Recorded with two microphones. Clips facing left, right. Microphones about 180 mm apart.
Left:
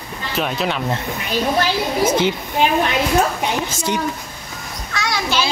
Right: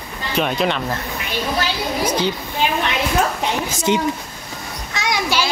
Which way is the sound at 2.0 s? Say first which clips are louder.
Left 3 dB; 25° left (ahead or behind).